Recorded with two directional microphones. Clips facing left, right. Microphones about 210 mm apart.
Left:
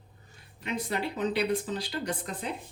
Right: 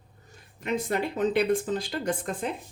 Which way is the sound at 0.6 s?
50° right (ahead or behind).